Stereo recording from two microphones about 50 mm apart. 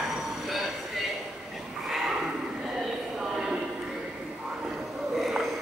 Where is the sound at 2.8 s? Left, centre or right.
Centre.